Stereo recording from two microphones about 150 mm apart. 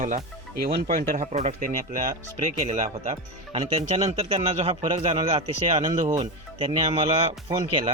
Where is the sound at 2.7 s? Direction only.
45° right (ahead or behind).